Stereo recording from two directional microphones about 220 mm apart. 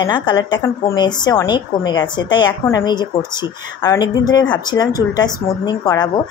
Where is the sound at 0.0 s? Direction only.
20° left (ahead or behind).